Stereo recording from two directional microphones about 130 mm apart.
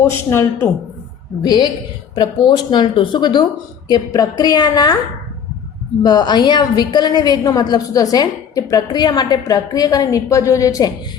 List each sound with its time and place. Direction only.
0.3 s a woman's voice: 20° left (ahead or behind)
1.4 s a woman's voice: 30° left (ahead or behind)
6.0 s a woman's voice: 30° left (ahead or behind)